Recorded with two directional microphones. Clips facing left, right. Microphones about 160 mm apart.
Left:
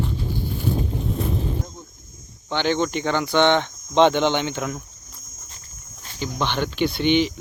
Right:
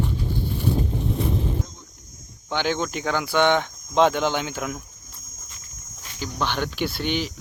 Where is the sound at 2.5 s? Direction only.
5° right (ahead or behind).